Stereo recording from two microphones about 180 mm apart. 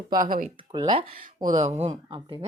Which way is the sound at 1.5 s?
40° right (ahead or behind).